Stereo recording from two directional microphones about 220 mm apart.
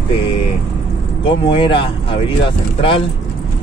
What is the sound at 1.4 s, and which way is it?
Speech, 25° left (ahead or behind).